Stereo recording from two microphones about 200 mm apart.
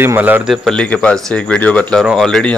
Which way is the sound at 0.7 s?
5° left (ahead or behind).